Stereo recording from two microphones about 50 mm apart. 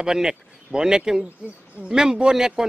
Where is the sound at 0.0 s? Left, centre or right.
Centre.